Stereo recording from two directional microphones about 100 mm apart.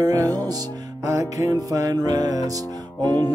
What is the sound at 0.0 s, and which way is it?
Music, 35° right (ahead or behind).